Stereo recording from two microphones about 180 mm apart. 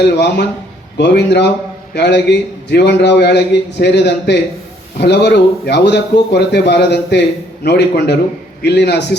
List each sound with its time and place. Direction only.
0.0 s a man's voice: 70° left (ahead or behind)